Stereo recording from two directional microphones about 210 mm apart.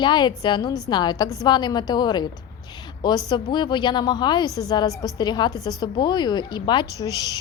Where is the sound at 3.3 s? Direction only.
20° left (ahead or behind).